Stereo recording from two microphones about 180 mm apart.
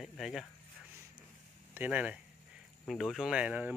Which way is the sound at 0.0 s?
Centre (ahead or behind).